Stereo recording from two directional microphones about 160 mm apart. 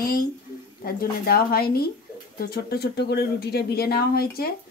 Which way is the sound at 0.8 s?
70° left (ahead or behind).